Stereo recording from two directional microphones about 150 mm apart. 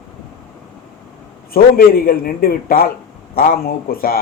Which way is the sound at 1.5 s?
80° left.